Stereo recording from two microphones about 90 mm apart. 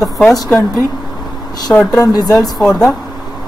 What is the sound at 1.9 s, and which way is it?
Speech, 45° left (ahead or behind).